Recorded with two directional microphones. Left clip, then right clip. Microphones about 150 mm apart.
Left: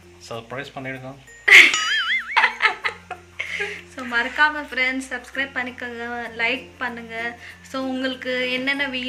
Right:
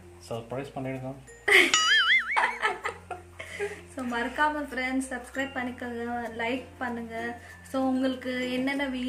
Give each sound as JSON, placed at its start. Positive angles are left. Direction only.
{"t": 0.3, "sound": "speech", "side_deg": 0}
{"t": 1.5, "sound": "music", "side_deg": -20}
{"t": 1.7, "sound": "music", "side_deg": 0}
{"t": 2.3, "sound": "music", "side_deg": -15}
{"t": 3.3, "sound": "a woman's voice", "side_deg": -20}